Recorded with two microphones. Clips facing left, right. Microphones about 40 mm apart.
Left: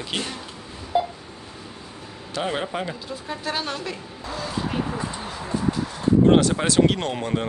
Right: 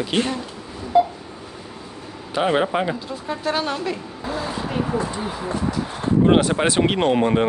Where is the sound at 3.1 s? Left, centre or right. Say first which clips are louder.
Right 5 dB; centre.